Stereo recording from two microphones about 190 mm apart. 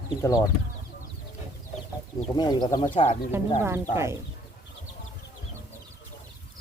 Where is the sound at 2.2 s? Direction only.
25° left (ahead or behind).